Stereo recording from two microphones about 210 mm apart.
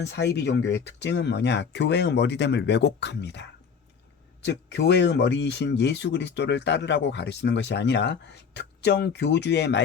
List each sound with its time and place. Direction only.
0.0 s speech: 55° left (ahead or behind)
4.4 s speech: 55° left (ahead or behind)